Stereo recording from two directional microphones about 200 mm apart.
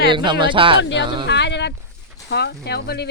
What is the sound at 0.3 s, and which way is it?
Speech, 25° right (ahead or behind).